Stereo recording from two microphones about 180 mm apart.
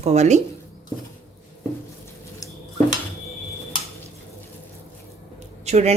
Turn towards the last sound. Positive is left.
turn(degrees=-40)  # may be behind; listen again after turning